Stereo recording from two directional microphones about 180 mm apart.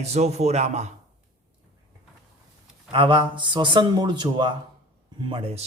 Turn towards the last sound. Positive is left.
turn(degrees=-30)  # may be behind; listen again after turning